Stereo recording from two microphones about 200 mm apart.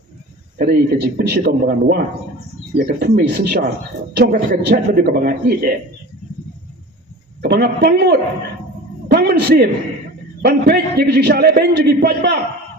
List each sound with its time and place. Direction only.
0.6 s a man's voice: 50° right (ahead or behind)
2.7 s a man's voice: 40° right (ahead or behind)
7.4 s a man's voice: 55° right (ahead or behind)